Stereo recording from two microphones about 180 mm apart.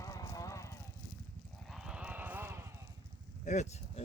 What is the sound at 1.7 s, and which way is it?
Clip-clop, 5° right (ahead or behind).